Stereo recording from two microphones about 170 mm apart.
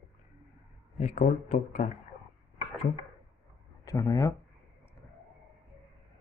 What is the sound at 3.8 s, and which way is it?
Speech, 20° left (ahead or behind).